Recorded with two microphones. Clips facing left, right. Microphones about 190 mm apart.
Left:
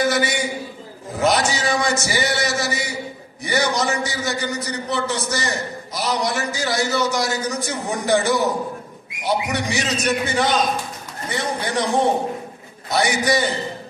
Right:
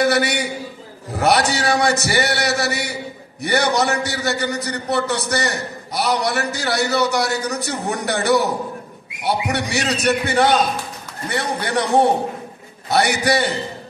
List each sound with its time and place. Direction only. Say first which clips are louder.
0.0 s a man's voice: right 2 dB; 65° right (ahead or behind)